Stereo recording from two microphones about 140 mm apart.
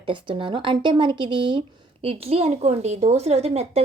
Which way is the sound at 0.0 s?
35° right (ahead or behind).